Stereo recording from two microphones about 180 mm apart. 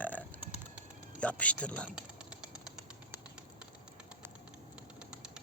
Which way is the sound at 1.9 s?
5° right (ahead or behind).